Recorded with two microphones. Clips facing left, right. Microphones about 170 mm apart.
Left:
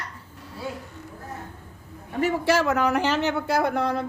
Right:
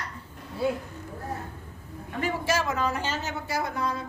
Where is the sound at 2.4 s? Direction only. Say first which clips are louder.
Left 5 dB; 70° left (ahead or behind).